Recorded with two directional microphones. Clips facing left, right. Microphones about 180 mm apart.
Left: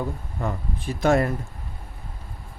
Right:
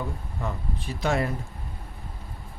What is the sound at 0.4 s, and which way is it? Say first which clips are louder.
Speech: left 4 dB; 50° left (ahead or behind).